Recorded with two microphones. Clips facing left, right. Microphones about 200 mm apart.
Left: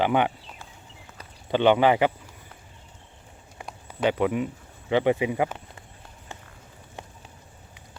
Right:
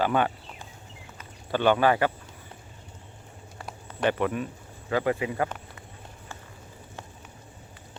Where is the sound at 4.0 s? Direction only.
15° left (ahead or behind).